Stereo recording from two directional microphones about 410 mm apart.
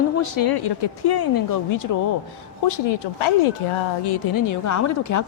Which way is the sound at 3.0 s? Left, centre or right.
Left.